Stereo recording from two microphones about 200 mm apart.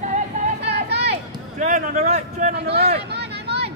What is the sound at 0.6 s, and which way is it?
Vehicle, 55° right (ahead or behind).